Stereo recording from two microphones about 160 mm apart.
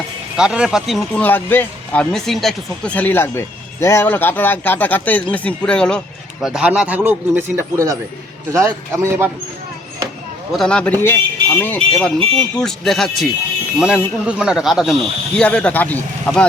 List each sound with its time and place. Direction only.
0.3 s speech: 5° right (ahead or behind)
6.4 s a man's voice: 5° right (ahead or behind)
10.5 s speech: 5° left (ahead or behind)